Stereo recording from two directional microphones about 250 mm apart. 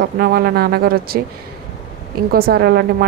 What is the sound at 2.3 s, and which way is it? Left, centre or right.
Speech, right.